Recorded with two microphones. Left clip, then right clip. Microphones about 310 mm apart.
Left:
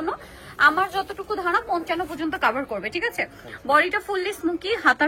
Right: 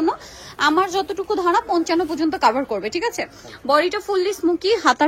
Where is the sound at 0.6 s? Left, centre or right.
Centre.